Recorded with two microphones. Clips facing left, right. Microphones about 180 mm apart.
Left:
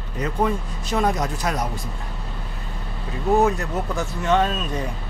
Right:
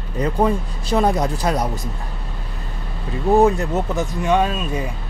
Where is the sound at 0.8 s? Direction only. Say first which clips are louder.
Right 4 dB; 30° right (ahead or behind).